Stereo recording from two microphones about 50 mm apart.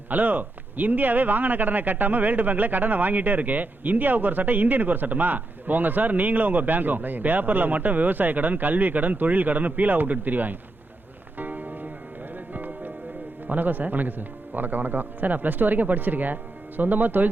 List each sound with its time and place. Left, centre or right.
0.1 s a man's voice: right
11.3 s music: right
13.5 s a man's voice: right